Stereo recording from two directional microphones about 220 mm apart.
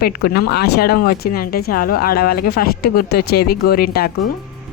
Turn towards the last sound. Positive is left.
turn(degrees=45)  # may be behind; listen again after turning